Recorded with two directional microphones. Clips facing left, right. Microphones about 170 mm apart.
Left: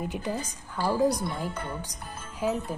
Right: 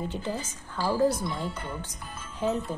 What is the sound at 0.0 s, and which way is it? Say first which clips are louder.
Speech: left 1 dB; 15° left (ahead or behind).